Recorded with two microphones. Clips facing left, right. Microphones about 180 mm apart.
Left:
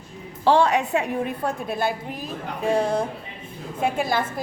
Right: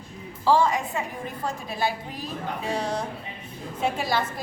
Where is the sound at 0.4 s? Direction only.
70° left (ahead or behind).